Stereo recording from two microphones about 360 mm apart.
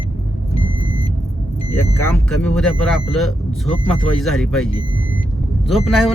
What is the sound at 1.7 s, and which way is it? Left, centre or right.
A man's voice, centre.